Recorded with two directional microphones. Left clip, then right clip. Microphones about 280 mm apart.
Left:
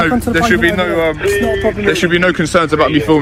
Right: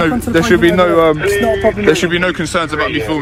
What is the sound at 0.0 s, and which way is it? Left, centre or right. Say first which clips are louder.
Speech: left 1 dB; centre.